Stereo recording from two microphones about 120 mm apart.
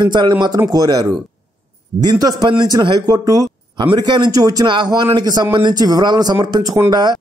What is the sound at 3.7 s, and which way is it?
A man's voice, 40° right (ahead or behind).